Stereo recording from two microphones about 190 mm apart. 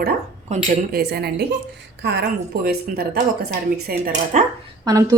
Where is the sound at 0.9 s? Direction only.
60° right (ahead or behind).